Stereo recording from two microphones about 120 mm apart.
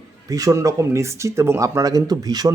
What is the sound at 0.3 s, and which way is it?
Speech, 30° right (ahead or behind).